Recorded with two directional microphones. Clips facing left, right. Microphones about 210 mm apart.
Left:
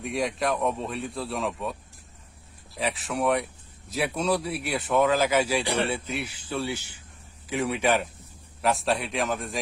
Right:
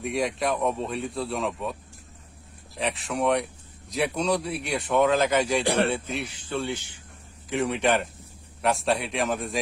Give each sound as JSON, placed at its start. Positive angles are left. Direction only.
{"t": 0.0, "sound": "speech", "side_deg": 0}
{"t": 2.7, "sound": "speech", "side_deg": 0}
{"t": 5.6, "sound": "speech", "side_deg": -50}
{"t": 5.9, "sound": "speech", "side_deg": 5}